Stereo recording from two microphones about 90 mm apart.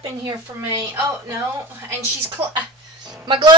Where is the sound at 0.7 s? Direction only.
35° right (ahead or behind).